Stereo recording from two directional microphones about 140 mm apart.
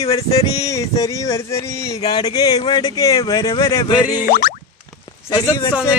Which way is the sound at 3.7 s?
25° left (ahead or behind).